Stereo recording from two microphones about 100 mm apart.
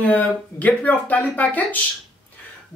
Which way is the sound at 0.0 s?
15° left (ahead or behind).